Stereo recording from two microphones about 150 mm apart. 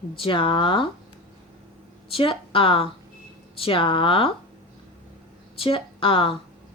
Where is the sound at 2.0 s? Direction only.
40° left (ahead or behind).